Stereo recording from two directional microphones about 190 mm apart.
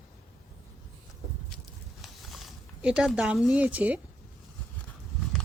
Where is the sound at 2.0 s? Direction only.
Centre (ahead or behind).